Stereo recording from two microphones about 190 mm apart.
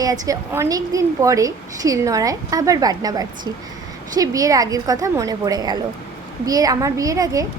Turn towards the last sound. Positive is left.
turn(degrees=-20)  # may be behind; listen again after turning